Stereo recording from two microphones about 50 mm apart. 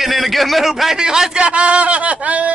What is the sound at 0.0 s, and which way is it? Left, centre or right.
A man's voice, centre.